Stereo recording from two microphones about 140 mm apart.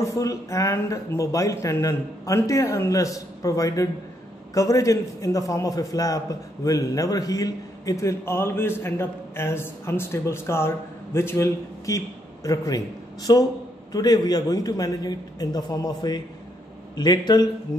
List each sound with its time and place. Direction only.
0.2 s a man's voice: 25° left (ahead or behind)